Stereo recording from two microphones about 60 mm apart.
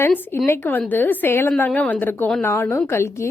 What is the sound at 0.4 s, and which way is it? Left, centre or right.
A woman's voice, left.